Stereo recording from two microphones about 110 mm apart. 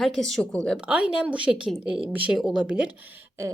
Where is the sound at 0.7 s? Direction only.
10° right (ahead or behind).